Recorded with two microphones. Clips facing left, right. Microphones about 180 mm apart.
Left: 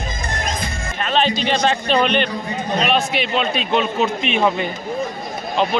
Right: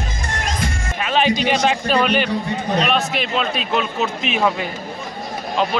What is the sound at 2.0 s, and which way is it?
A man's voice, 5° right (ahead or behind).